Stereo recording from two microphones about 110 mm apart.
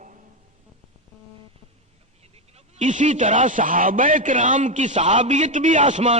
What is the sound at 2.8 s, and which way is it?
A man's voice, 90° right.